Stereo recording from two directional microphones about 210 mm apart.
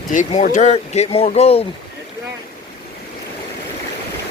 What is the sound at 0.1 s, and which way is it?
Speech, 35° left (ahead or behind).